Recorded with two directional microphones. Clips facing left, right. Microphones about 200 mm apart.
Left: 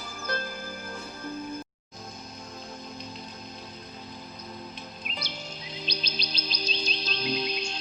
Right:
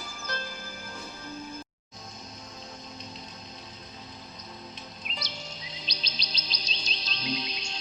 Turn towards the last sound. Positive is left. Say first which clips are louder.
# left 4 dB
turn(degrees=55)  # may be behind; listen again after turning